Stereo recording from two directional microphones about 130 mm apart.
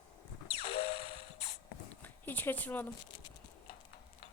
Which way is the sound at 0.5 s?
50° left (ahead or behind).